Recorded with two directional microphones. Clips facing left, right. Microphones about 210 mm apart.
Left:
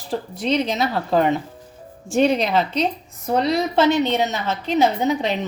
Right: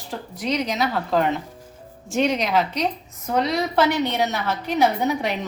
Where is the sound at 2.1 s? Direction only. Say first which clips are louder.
Left 3 dB; 30° left (ahead or behind).